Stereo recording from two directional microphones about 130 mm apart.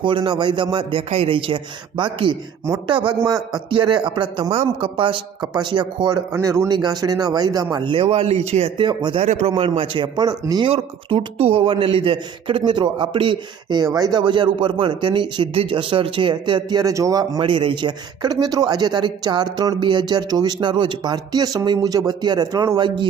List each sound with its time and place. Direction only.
0.0 s speech: 40° right (ahead or behind)
6.3 s speech: 20° right (ahead or behind); by 8.9 s 50° right (ahead or behind)
8.9 s speech: 35° right (ahead or behind)
9.2 s a man's voice: 65° right (ahead or behind)
9.6 s speech: 45° right (ahead or behind)
10.7 s speech: 45° right (ahead or behind); by 17.4 s 30° right (ahead or behind)
17.4 s speech: 40° right (ahead or behind)